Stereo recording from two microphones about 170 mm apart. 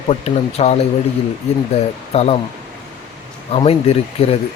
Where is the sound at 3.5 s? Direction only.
35° left (ahead or behind).